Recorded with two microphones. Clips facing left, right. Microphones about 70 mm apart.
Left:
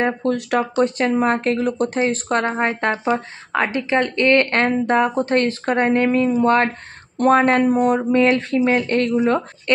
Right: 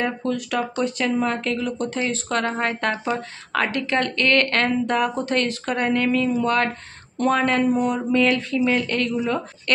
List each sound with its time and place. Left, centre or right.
0.0 s speech: left
2.0 s speech: left